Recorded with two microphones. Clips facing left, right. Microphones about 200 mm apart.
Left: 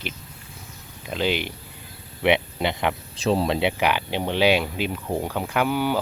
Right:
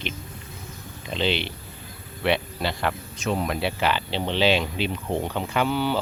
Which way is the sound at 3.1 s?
30° left (ahead or behind).